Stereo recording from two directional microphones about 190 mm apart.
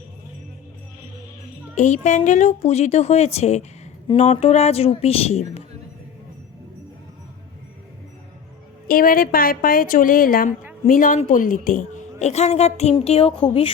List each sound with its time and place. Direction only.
1.7 s a woman's voice: 40° left (ahead or behind)
8.9 s a woman's voice: 50° left (ahead or behind); by 13.7 s 30° left (ahead or behind)